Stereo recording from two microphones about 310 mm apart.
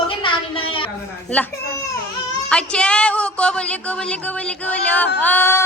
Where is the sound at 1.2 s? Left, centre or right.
Centre.